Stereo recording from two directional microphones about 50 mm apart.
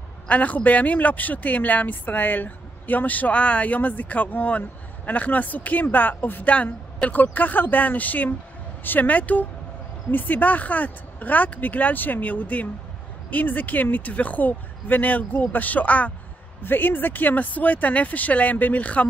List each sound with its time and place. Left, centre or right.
0.3 s speech: left
6.5 s speech: left
16.6 s speech: left